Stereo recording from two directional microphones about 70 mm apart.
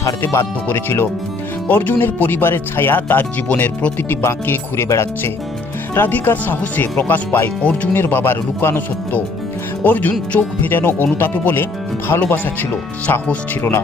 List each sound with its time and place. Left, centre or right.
0.2 s speech: left
4.1 s speech: left
4.4 s speech: left
4.9 s speech: left
5.9 s speech: left
13.6 s speech: left